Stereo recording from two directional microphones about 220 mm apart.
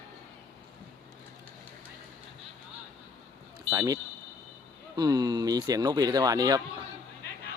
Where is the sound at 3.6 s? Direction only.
15° right (ahead or behind).